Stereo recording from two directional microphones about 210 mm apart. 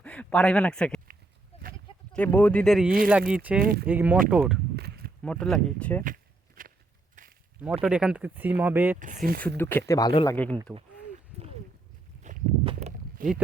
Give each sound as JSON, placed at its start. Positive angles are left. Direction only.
{"t": 0.0, "sound": "speech", "side_deg": 5}
{"t": 1.5, "sound": "sheep", "side_deg": 30}
{"t": 2.1, "sound": "speech", "side_deg": 10}
{"t": 3.6, "sound": "speech", "side_deg": -40}
{"t": 3.8, "sound": "speech", "side_deg": -10}
{"t": 4.8, "sound": "walk", "side_deg": -45}
{"t": 5.2, "sound": "speech", "side_deg": 5}
{"t": 6.6, "sound": "a sound", "side_deg": -40}
{"t": 7.6, "sound": "speech", "side_deg": -5}
{"t": 9.0, "sound": "speech", "side_deg": -40}
{"t": 9.6, "sound": "speech", "side_deg": 10}
{"t": 10.1, "sound": "speech", "side_deg": 25}
{"t": 10.3, "sound": "speech", "side_deg": 5}
{"t": 12.2, "sound": "walk", "side_deg": -35}